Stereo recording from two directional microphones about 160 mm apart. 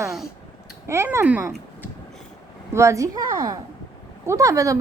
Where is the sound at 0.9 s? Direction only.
15° right (ahead or behind).